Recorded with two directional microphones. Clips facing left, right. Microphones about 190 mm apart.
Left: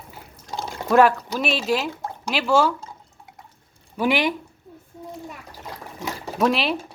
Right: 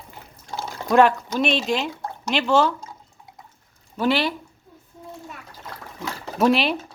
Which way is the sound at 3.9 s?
15° left (ahead or behind).